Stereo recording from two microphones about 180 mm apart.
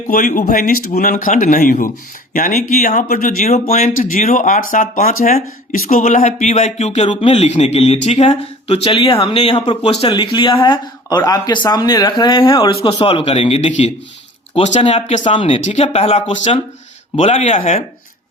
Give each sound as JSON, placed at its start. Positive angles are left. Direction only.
{"t": 0.1, "sound": "speech", "side_deg": 45}